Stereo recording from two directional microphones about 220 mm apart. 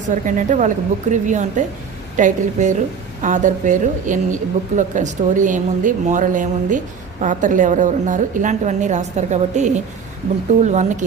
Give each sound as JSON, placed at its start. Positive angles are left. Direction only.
{"t": 0.1, "sound": "a woman's voice", "side_deg": -35}